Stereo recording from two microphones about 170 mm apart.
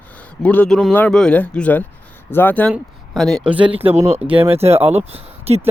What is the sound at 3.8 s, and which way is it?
Speech, 40° right (ahead or behind).